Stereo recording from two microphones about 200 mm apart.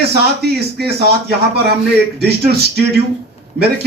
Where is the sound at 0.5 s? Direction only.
55° right (ahead or behind).